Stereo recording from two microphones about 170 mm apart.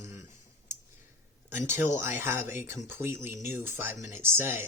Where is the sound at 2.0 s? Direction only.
15° right (ahead or behind).